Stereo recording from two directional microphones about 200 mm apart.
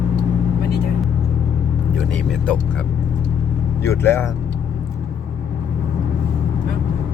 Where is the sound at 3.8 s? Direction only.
15° left (ahead or behind).